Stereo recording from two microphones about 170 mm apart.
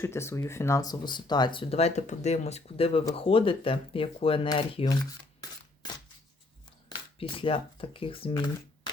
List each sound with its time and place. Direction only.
0.0 s speech: 15° left (ahead or behind); by 4.9 s 30° left (ahead or behind)
6.8 s speech: 30° left (ahead or behind)